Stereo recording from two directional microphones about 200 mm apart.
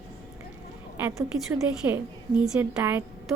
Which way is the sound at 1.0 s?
10° right (ahead or behind).